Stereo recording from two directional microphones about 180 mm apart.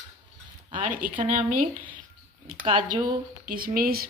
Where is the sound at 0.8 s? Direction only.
45° right (ahead or behind).